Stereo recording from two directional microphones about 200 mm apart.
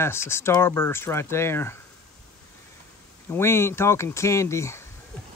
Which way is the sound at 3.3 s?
10° left (ahead or behind).